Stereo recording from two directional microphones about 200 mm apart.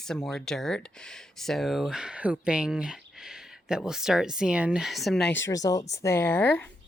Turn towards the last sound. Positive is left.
turn(degrees=10)  # may be behind; listen again after turning